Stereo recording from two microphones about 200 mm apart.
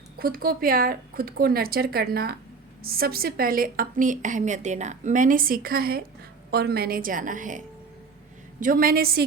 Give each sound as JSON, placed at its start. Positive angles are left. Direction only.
{"t": 0.2, "sound": "a woman's voice", "side_deg": -50}
{"t": 8.6, "sound": "a woman's voice", "side_deg": -45}